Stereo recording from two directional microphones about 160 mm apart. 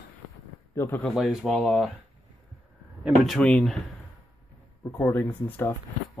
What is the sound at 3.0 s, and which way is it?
Speech, centre (ahead or behind).